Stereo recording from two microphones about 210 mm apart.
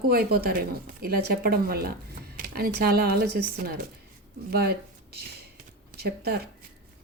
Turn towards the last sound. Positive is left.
turn(degrees=-50)  # may be behind; listen again after turning